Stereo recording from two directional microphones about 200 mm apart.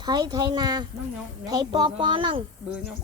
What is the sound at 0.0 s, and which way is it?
Speech, 20° right (ahead or behind).